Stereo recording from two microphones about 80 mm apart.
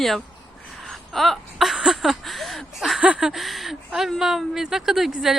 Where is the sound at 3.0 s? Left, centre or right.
Centre.